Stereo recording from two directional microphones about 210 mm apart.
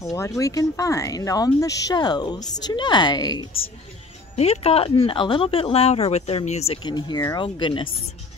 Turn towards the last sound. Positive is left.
turn(degrees=25)  # may be behind; listen again after turning